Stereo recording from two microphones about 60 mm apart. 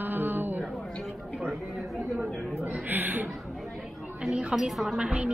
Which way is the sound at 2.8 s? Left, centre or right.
Right.